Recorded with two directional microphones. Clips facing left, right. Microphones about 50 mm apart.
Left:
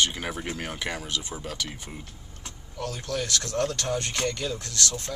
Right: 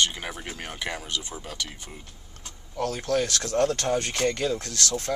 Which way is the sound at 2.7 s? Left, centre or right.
Right.